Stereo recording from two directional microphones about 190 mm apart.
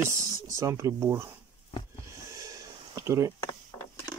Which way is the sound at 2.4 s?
15° right (ahead or behind).